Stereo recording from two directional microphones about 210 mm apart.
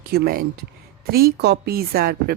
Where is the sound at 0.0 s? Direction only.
50° right (ahead or behind).